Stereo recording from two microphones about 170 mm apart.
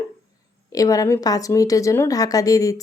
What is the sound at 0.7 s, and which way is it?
Speech, 20° left (ahead or behind).